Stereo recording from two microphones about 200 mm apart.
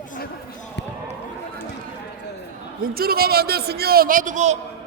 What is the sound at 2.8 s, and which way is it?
A man's voice, 50° right (ahead or behind).